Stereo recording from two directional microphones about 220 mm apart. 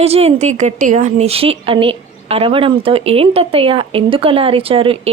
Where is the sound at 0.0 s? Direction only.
30° right (ahead or behind).